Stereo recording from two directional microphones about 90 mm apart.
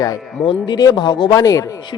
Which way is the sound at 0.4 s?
65° left (ahead or behind).